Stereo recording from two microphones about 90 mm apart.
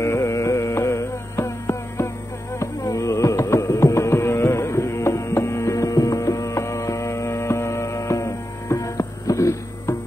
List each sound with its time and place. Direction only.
0.0 s carnatic music: 30° left (ahead or behind)